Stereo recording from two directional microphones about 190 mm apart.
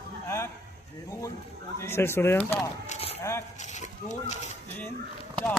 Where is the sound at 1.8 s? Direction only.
15° left (ahead or behind).